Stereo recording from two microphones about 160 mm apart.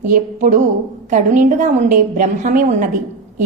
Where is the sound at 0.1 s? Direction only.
55° right (ahead or behind).